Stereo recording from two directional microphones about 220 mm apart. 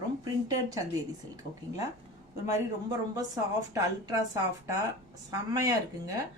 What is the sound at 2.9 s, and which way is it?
Speech, 15° right (ahead or behind).